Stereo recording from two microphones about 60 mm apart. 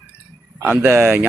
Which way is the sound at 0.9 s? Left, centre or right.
Right.